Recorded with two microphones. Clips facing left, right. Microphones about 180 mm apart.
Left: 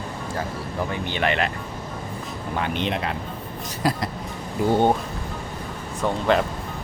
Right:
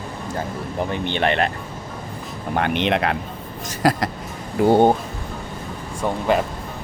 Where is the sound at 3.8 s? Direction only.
90° right.